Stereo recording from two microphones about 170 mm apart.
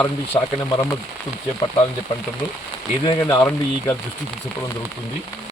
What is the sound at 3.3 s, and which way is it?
Speech, 10° left (ahead or behind).